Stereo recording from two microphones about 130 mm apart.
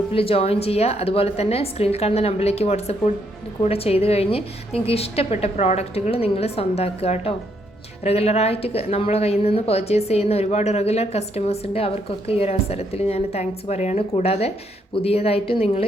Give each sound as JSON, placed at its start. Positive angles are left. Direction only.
{"t": 0.1, "sound": "a woman's voice", "side_deg": 45}